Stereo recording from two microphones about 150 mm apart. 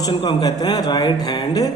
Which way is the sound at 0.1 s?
35° left (ahead or behind).